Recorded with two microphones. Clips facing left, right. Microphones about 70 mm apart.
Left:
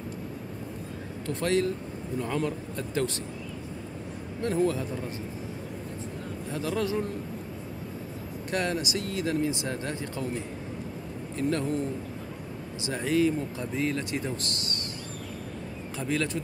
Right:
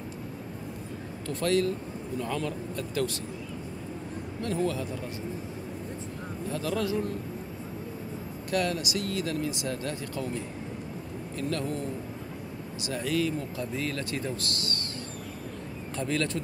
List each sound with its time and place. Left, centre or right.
1.2 s speech: left
4.4 s speech: left
6.5 s a man's voice: centre
8.5 s speech: left
11.4 s speech: left
12.8 s speech: left
16.0 s a man's voice: centre